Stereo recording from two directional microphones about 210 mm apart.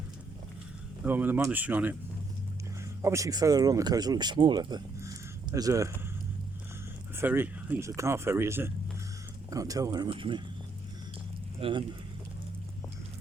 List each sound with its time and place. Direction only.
1.0 s speech: 10° right (ahead or behind)
3.0 s speech: 15° right (ahead or behind)
7.2 s speech: 10° right (ahead or behind)
11.6 s speech: 25° right (ahead or behind)